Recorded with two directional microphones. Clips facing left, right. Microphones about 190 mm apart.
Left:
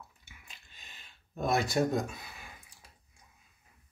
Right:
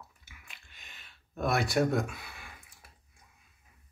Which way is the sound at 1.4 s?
20° left (ahead or behind).